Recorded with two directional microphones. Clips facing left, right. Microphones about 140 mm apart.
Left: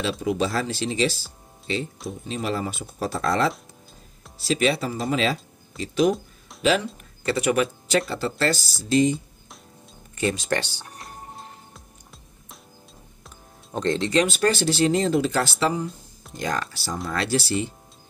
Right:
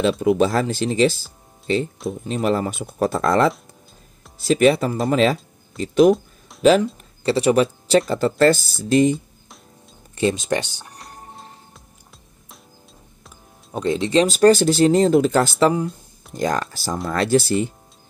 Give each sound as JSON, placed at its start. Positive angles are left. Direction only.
{"t": 0.2, "sound": "speech", "side_deg": -55}
{"t": 2.2, "sound": "speech", "side_deg": -50}
{"t": 6.6, "sound": "speech", "side_deg": -40}
{"t": 7.2, "sound": "speech", "side_deg": -30}
{"t": 8.1, "sound": "speech", "side_deg": -50}
{"t": 10.1, "sound": "speech", "side_deg": -20}
{"t": 11.0, "sound": "music", "side_deg": 0}
{"t": 13.2, "sound": "music", "side_deg": -5}
{"t": 14.2, "sound": "speech", "side_deg": -35}
{"t": 16.3, "sound": "speech", "side_deg": -45}